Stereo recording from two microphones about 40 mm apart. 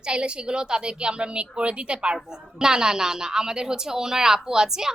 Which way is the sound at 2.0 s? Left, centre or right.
Centre.